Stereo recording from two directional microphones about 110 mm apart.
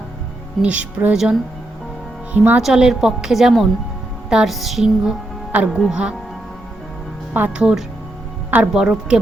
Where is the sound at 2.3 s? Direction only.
15° right (ahead or behind).